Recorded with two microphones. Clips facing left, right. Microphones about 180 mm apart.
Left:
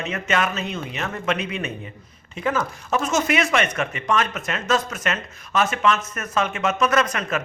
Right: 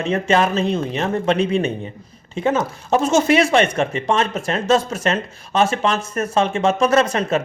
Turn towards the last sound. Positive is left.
turn(degrees=-30)  # may be behind; listen again after turning